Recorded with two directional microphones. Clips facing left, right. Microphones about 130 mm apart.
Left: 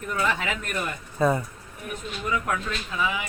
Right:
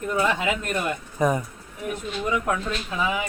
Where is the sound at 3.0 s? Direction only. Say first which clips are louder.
Right 2 dB; 35° right (ahead or behind).